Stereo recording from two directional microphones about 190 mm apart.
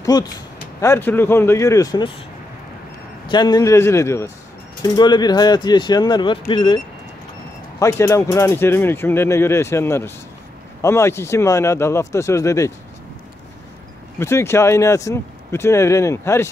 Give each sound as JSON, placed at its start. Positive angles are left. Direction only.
{"t": 0.1, "sound": "speech", "side_deg": 20}
{"t": 3.3, "sound": "speech", "side_deg": 25}
{"t": 7.8, "sound": "speech", "side_deg": 15}
{"t": 14.2, "sound": "speech", "side_deg": 15}